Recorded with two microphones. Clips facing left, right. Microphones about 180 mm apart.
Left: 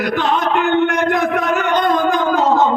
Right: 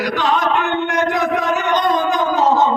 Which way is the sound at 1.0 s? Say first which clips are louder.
Left 1 dB; 55° left (ahead or behind).